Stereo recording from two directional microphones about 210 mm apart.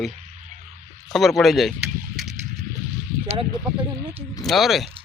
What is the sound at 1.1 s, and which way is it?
Speech, centre (ahead or behind).